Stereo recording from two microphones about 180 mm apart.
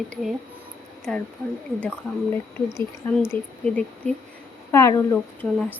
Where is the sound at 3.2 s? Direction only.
5° left (ahead or behind).